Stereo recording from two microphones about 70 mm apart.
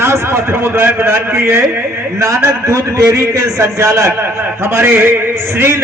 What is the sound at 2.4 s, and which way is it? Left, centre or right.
A man's voice, right.